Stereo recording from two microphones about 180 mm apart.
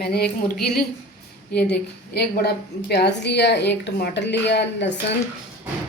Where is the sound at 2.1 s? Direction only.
65° left (ahead or behind).